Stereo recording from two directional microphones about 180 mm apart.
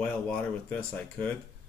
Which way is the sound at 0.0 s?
5° left (ahead or behind).